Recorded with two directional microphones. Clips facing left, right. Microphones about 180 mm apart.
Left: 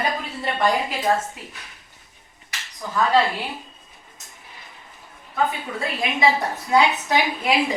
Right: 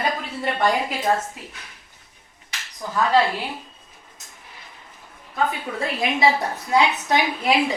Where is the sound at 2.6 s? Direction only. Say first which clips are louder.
Right 1 dB; centre (ahead or behind).